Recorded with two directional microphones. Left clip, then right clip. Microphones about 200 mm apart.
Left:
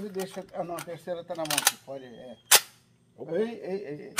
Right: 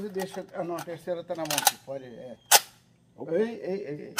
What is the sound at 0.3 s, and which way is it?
A man's voice, 25° right (ahead or behind).